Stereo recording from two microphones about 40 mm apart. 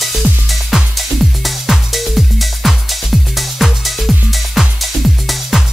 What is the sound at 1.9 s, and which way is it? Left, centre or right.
Music, centre.